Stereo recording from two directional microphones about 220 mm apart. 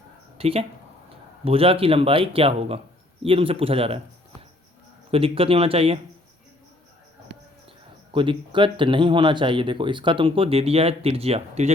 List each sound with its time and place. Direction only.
0.3 s speech: 25° right (ahead or behind)
5.1 s speech: 25° right (ahead or behind)
7.3 s a sound: 50° right (ahead or behind)
8.1 s speech: 20° right (ahead or behind)